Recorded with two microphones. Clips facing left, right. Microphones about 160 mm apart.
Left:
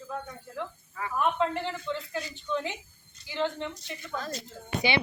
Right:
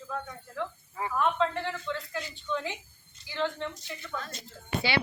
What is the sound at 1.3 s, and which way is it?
Speech, 15° left (ahead or behind).